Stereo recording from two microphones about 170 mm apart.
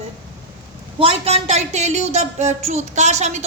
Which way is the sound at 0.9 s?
35° right (ahead or behind).